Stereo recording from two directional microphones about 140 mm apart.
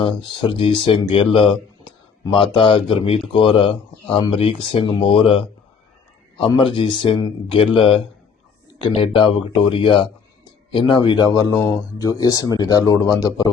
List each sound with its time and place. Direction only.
0.0 s speech: 35° left (ahead or behind)
6.6 s speech: 40° left (ahead or behind)